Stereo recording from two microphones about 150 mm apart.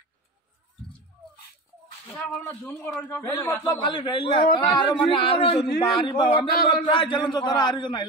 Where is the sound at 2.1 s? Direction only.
Centre (ahead or behind).